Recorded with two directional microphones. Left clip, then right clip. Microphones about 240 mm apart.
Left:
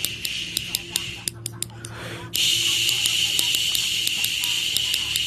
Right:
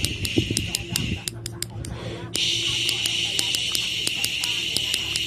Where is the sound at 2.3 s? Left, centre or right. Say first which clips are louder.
Left 3 dB; left.